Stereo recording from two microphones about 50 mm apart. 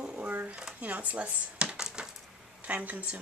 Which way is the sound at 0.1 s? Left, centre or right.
Right.